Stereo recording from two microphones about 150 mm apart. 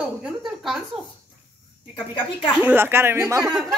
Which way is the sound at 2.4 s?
5° right (ahead or behind).